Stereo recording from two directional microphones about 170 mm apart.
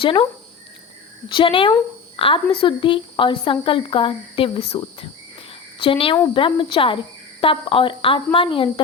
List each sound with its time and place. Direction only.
0.0 s a woman's voice: 30° left (ahead or behind)
1.3 s a woman's voice: 30° left (ahead or behind)
5.8 s a woman's voice: 30° left (ahead or behind)